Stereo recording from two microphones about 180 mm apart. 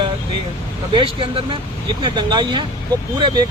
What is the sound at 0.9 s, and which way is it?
Speech, 30° right (ahead or behind).